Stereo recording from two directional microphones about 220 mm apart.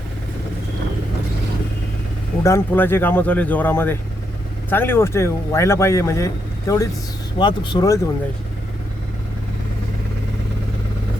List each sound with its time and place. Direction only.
2.4 s speech: 10° left (ahead or behind)